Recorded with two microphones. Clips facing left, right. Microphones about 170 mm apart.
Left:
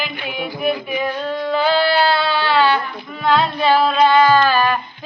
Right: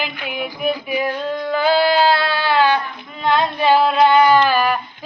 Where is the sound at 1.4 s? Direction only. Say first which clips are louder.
Right 1 dB; 10° right (ahead or behind).